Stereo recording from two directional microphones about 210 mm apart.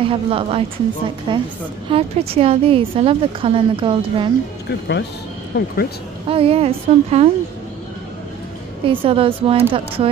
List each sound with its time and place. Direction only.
0.0 s a woman's voice: 25° right (ahead or behind)
4.6 s speech: 55° left (ahead or behind)
6.2 s a woman's voice: 25° right (ahead or behind)
8.8 s a woman's voice: 25° right (ahead or behind)